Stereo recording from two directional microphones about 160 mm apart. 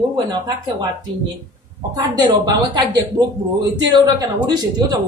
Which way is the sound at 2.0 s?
25° right (ahead or behind).